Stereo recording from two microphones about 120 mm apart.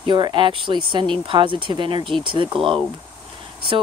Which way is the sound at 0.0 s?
40° right (ahead or behind).